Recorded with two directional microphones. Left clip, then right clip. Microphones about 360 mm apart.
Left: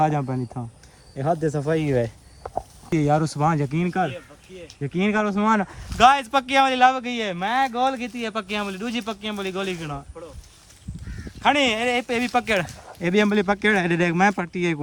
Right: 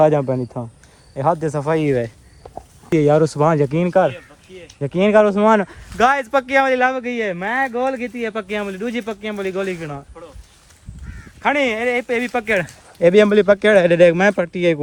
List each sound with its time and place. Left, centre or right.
0.0 s speech: centre
1.2 s speech: centre
1.9 s speech: left
2.9 s speech: centre
11.3 s speech: centre
13.0 s speech: centre